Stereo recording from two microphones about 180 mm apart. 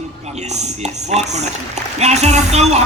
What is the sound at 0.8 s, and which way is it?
A man's voice, 40° right (ahead or behind).